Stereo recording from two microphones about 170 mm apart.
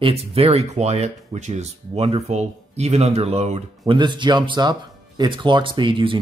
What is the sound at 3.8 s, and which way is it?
Speech, 25° right (ahead or behind).